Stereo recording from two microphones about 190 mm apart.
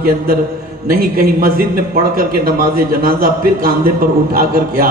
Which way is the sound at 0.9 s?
50° right (ahead or behind).